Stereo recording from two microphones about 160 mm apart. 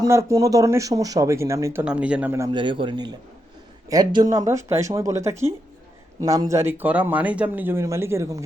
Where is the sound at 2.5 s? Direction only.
30° right (ahead or behind).